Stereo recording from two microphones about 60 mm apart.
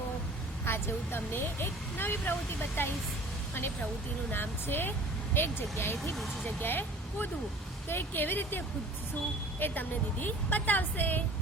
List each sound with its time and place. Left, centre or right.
0.6 s speech: left
4.3 s speech: left